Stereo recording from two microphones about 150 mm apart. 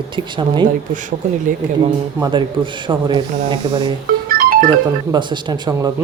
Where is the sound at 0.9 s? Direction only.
55° right (ahead or behind).